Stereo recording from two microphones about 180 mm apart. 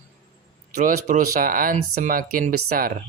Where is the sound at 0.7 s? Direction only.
45° right (ahead or behind).